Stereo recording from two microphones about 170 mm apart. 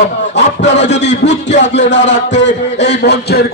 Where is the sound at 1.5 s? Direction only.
90° left.